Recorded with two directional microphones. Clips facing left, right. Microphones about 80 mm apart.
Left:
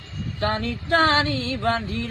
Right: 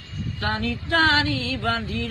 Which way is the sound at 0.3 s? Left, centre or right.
Left.